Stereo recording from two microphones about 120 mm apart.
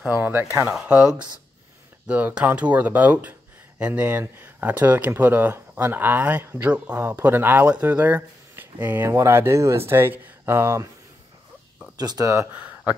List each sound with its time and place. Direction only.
0.0 s speech: 15° right (ahead or behind)
12.0 s speech: 30° right (ahead or behind)
12.5 s a sound: 10° right (ahead or behind)